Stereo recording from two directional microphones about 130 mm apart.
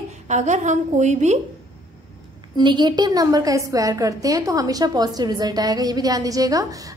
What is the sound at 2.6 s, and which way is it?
A woman's voice, 35° right (ahead or behind).